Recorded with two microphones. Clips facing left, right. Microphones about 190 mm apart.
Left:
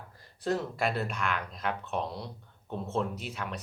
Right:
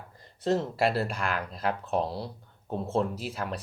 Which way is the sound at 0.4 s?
25° right (ahead or behind).